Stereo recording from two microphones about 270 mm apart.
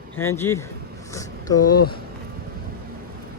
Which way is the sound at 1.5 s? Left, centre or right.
Left.